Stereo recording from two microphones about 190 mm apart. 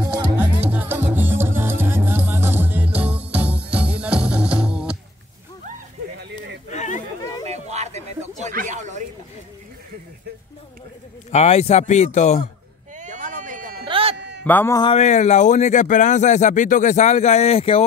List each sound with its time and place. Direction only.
0.4 s music: 10° right (ahead or behind)
6.7 s a sound: 40° left (ahead or behind)
7.4 s a sound: 35° right (ahead or behind)
11.3 s speech: 35° left (ahead or behind)
12.9 s a sound: 40° right (ahead or behind)
13.8 s sheep: 30° right (ahead or behind)
14.1 s bleat: 65° right (ahead or behind)
14.4 s speech: 10° left (ahead or behind)
14.8 s speech: 30° left (ahead or behind)